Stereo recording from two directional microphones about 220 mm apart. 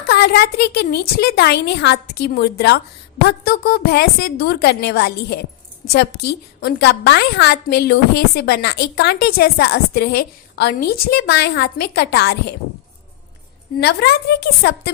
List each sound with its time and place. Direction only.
0.1 s a woman's voice: 45° left (ahead or behind)
13.7 s a woman's voice: 50° left (ahead or behind)